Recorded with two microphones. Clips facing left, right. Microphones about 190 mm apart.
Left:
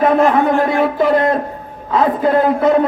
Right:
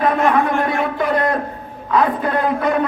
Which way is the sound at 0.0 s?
25° left (ahead or behind).